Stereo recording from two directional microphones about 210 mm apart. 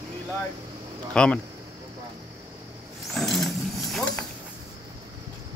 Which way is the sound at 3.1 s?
Centre (ahead or behind).